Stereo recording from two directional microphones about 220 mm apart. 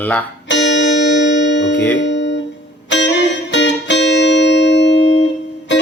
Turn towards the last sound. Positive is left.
turn(degrees=55)  # may be behind; listen again after turning